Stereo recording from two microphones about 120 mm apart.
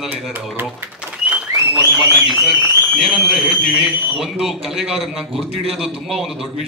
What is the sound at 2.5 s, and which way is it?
A man's voice, centre (ahead or behind).